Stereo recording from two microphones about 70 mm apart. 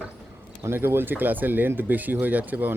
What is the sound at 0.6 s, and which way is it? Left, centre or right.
Speech, right.